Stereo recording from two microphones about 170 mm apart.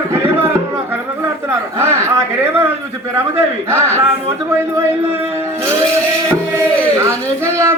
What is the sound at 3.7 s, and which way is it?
Speech, 15° right (ahead or behind).